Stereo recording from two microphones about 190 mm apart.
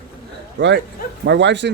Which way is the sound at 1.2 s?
65° right (ahead or behind).